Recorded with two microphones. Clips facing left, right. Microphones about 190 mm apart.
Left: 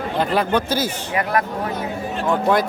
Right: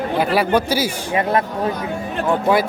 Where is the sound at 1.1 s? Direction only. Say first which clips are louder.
Right 3 dB; 25° right (ahead or behind).